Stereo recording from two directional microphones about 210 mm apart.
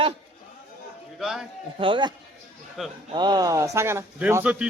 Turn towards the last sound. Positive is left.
turn(degrees=-5)  # may be behind; listen again after turning